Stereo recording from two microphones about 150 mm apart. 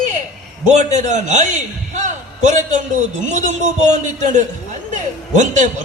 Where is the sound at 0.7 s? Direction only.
55° right (ahead or behind).